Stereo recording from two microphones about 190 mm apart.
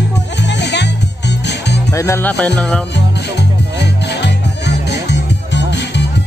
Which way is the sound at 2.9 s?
65° left (ahead or behind).